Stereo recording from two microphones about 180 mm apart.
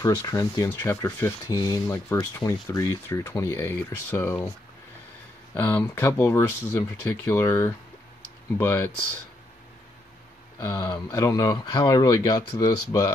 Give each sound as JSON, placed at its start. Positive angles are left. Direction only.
{"t": 0.0, "sound": "speech", "side_deg": 20}
{"t": 5.5, "sound": "speech", "side_deg": 10}
{"t": 10.6, "sound": "speech", "side_deg": 20}